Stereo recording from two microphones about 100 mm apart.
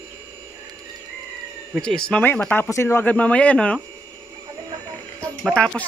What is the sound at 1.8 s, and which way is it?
Speech, 5° left (ahead or behind).